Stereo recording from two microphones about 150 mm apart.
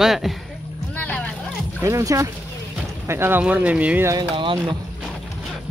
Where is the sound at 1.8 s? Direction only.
20° right (ahead or behind).